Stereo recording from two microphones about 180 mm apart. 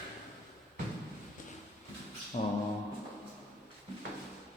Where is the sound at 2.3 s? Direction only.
40° left (ahead or behind).